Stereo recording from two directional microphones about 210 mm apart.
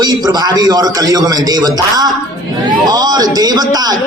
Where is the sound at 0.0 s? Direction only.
20° right (ahead or behind).